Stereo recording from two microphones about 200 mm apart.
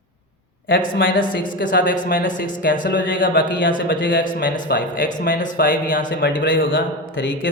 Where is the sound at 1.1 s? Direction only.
45° left (ahead or behind).